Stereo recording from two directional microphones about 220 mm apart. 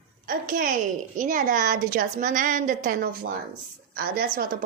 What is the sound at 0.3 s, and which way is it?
A woman's voice, 40° right (ahead or behind).